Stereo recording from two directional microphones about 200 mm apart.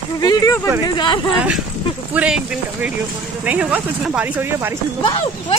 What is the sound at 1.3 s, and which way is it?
Speech, 5° right (ahead or behind).